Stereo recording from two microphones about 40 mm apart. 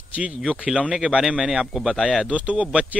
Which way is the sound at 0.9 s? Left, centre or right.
Centre.